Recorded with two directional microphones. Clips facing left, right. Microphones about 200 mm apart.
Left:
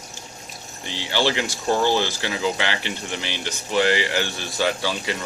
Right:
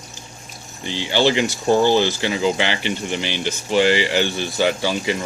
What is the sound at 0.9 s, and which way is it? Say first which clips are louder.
Speech: right 5 dB; 20° right (ahead or behind).